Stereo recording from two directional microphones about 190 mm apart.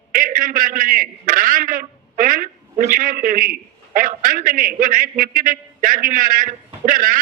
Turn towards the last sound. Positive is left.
turn(degrees=-45)  # may be behind; listen again after turning